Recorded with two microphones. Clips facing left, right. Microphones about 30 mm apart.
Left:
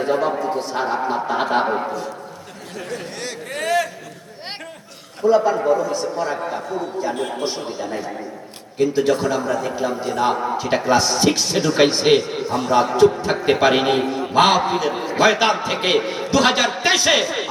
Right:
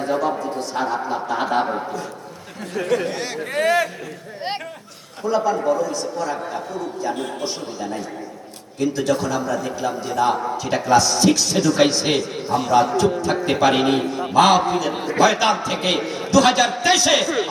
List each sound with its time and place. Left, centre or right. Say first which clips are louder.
0.0 s a sound: left 2 dB; left
3.1 s a sound: right 3 dB; centre
5.3 s a man's voice: left 3 dB; left
6.4 s a man's voice: left 2 dB; centre
7.4 s a man's voice: left 2 dB; left
13.0 s a man's voice: left 4 dB; left